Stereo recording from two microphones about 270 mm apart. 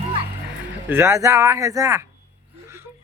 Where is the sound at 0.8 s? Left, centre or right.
Centre.